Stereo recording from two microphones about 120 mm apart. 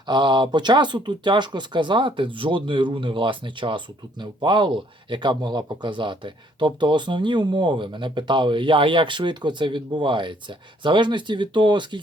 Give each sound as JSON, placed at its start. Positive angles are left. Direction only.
{"t": 0.1, "sound": "speech", "side_deg": -40}